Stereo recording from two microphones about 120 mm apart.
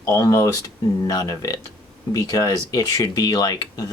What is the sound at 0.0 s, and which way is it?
Speech, 30° left (ahead or behind).